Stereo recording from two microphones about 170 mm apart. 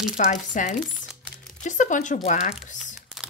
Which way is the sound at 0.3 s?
50° left (ahead or behind).